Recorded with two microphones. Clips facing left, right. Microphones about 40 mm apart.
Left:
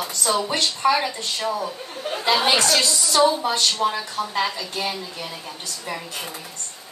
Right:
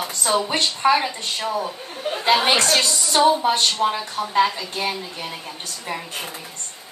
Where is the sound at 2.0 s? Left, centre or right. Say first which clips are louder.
Right 2 dB; centre.